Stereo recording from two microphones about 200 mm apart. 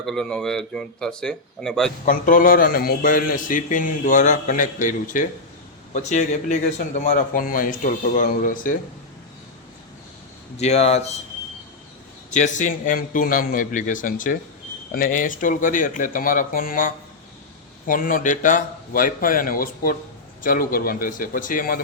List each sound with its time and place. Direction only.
0.0 s speech: centre (ahead or behind)
2.0 s a man's voice: 45° left (ahead or behind)
10.6 s speech: 30° left (ahead or behind)
12.3 s a man's voice: 35° left (ahead or behind)